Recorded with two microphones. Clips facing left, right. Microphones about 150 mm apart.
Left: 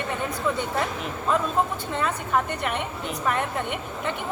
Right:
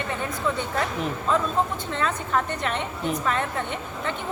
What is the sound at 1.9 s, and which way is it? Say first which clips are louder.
A woman's voice: even; 10° left (ahead or behind).